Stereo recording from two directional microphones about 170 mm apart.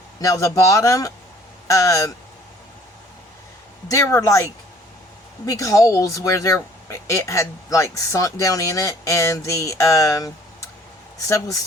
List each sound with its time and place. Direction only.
0.2 s speech: 20° left (ahead or behind)
3.8 s speech: 20° left (ahead or behind)